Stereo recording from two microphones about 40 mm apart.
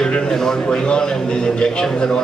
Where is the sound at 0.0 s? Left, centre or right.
Centre.